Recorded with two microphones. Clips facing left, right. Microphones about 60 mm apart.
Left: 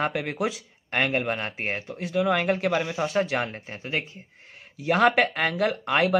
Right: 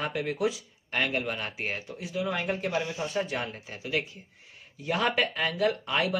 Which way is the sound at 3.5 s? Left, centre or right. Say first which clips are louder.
Left 1 dB; left.